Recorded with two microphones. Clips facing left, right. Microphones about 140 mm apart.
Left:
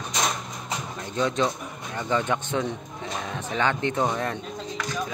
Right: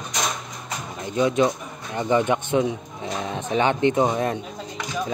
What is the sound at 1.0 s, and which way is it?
Speech, 10° right (ahead or behind).